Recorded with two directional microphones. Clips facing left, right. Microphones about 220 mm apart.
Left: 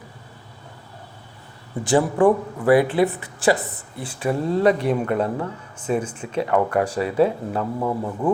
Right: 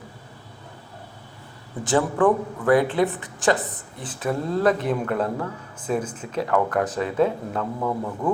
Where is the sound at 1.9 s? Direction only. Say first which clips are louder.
Left 3 dB; 15° left (ahead or behind).